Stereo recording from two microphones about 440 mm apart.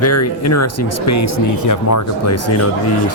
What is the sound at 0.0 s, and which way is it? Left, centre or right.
Speech, left.